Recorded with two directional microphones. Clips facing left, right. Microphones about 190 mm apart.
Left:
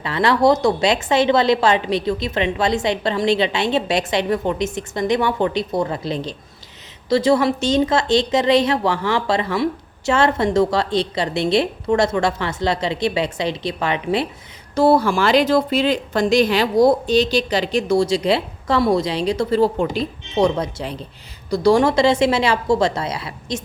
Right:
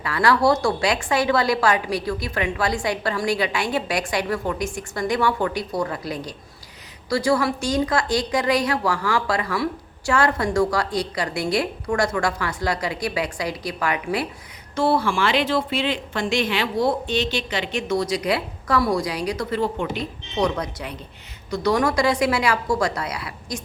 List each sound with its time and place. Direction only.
0.0 s a woman's voice: 25° left (ahead or behind)
14.8 s a woman's voice: 40° left (ahead or behind); by 23.6 s 25° left (ahead or behind)